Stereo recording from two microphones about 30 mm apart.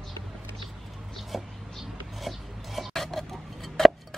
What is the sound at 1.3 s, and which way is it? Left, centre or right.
Speech, centre.